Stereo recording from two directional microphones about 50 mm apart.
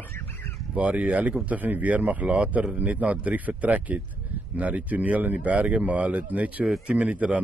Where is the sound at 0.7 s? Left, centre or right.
Right.